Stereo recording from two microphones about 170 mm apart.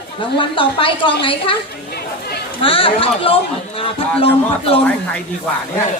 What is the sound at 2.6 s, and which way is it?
Speech, 30° left (ahead or behind).